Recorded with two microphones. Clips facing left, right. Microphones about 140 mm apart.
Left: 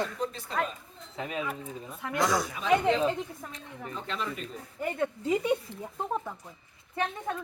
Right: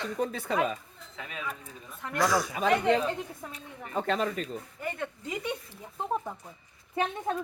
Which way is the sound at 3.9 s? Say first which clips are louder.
Right 7 dB; 55° right (ahead or behind).